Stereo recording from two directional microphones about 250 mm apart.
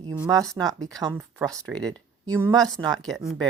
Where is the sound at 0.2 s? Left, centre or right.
Centre.